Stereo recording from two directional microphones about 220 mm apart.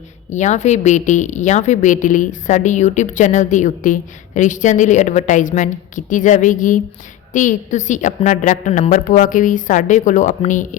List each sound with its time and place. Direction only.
0.3 s a woman's voice: 35° left (ahead or behind)